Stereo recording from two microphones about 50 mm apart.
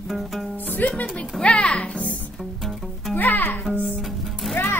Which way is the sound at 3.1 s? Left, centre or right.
Left.